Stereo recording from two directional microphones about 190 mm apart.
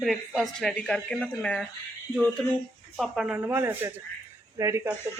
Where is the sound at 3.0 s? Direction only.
5° right (ahead or behind).